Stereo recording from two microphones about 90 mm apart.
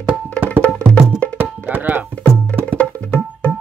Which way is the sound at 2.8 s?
15° left (ahead or behind).